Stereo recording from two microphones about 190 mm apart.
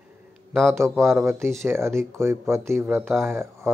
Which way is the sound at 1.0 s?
15° right (ahead or behind).